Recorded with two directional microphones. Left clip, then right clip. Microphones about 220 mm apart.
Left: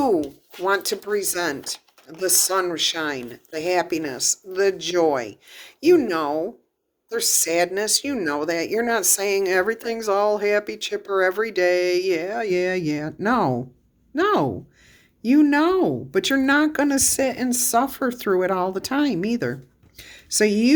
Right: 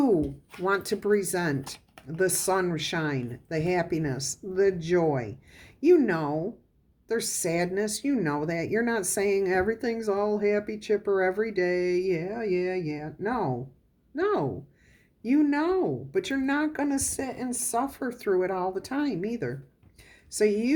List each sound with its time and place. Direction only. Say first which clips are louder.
0.0 s speech: left 4 dB; 25° left (ahead or behind)